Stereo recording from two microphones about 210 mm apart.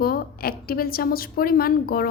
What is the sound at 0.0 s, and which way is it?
A woman's voice, 45° left (ahead or behind).